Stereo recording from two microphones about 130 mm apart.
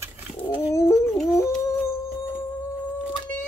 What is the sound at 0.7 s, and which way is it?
Dog, 25° left (ahead or behind).